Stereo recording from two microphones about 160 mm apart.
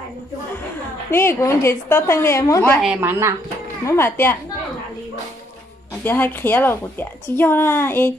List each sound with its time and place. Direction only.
1.1 s a woman's voice: 15° left (ahead or behind)
2.8 s a woman's voice: 10° right (ahead or behind)
3.8 s a woman's voice: 15° left (ahead or behind)
6.0 s a woman's voice: 10° left (ahead or behind)